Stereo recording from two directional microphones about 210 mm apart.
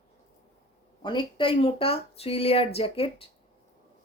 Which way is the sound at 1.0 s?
25° left (ahead or behind).